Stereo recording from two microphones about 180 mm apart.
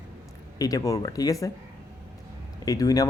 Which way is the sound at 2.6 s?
20° left (ahead or behind).